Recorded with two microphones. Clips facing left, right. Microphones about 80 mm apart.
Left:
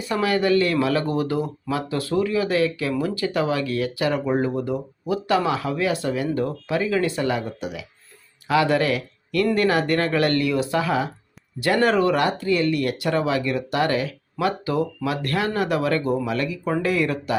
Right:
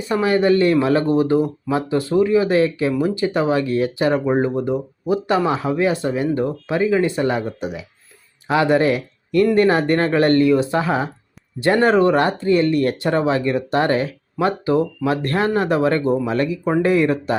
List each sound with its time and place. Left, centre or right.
0.1 s speech: right